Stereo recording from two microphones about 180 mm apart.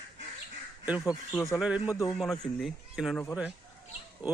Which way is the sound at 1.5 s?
5° right (ahead or behind).